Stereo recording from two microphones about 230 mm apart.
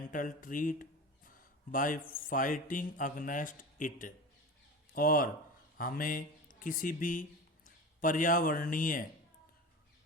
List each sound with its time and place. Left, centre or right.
0.1 s speech: left